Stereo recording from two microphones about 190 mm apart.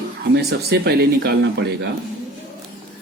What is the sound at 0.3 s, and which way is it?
Speech, 60° right (ahead or behind).